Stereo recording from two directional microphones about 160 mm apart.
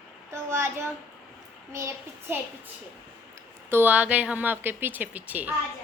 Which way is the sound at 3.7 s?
10° right (ahead or behind).